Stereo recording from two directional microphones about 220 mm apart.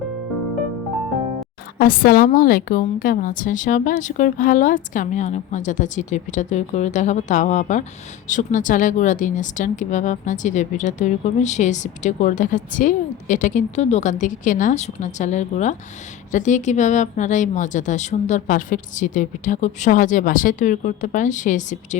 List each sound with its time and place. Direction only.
1.8 s speech: 40° left (ahead or behind)